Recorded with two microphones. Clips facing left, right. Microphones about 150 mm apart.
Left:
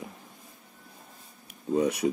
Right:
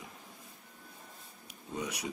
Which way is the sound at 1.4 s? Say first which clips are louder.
Left 13 dB; 50° left (ahead or behind).